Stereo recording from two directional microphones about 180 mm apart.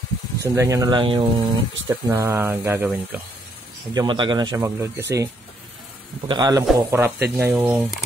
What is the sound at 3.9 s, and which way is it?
Speech, 25° right (ahead or behind).